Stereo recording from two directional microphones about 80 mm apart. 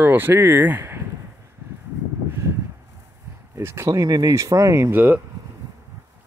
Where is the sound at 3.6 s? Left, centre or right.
Right.